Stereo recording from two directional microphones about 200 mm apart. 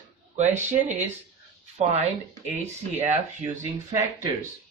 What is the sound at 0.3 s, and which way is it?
Speech, 35° right (ahead or behind).